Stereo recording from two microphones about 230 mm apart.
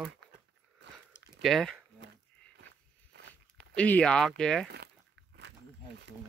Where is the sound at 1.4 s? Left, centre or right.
Centre.